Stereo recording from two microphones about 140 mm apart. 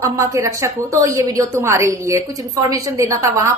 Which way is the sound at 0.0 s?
20° right (ahead or behind).